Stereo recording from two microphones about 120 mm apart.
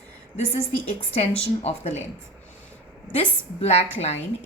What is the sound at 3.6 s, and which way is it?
Speech, 60° left (ahead or behind).